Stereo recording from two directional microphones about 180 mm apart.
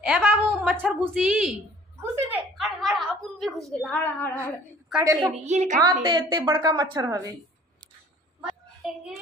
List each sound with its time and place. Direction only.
0.0 s a woman's voice: 5° right (ahead or behind)
2.5 s a woman's voice: centre (ahead or behind)
5.0 s a woman's voice: 20° right (ahead or behind)
5.3 s a woman's voice: 40° right (ahead or behind)
6.0 s a woman's voice: 25° right (ahead or behind)
8.4 s a sound: 5° right (ahead or behind)